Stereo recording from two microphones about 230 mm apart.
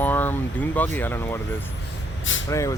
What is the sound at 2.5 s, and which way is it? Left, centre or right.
Speech, centre.